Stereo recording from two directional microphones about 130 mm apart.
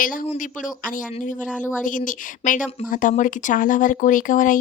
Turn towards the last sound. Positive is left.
turn(degrees=90)